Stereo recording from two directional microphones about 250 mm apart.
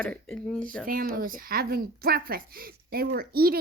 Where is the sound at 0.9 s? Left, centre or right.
Right.